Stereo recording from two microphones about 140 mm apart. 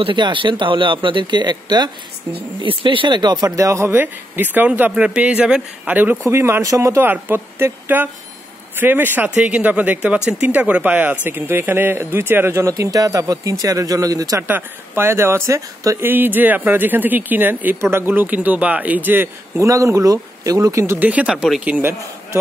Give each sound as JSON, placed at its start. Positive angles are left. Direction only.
{"t": 0.0, "sound": "speech", "side_deg": -35}